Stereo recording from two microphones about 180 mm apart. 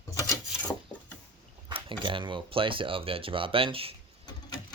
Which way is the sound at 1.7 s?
30° right (ahead or behind).